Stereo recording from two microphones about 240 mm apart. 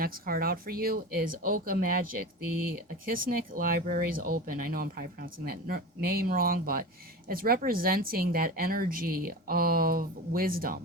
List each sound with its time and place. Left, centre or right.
0.0 s speech: right